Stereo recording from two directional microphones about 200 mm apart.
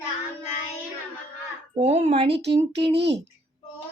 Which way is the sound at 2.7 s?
55° right (ahead or behind).